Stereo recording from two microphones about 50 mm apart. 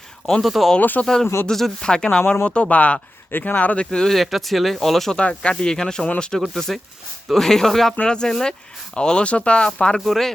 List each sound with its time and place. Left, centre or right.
0.4 s speech: centre
0.8 s speech: left
1.0 s speech: centre; by 3.8 s left
3.9 s speech: centre
5.1 s speech: left
6.5 s speech: centre
10.0 s speech: centre